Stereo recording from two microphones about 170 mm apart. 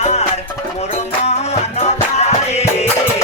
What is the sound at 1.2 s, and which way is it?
Music, 40° left (ahead or behind).